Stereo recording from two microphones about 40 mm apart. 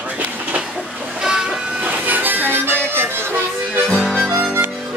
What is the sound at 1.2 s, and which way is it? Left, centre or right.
Train, centre.